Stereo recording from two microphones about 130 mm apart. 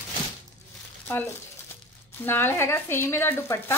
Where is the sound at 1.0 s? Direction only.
15° left (ahead or behind).